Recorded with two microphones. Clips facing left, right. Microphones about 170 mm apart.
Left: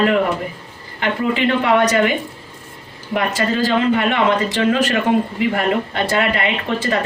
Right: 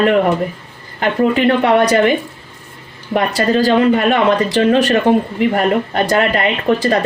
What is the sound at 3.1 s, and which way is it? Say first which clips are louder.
Speech: right 4 dB; 35° right (ahead or behind).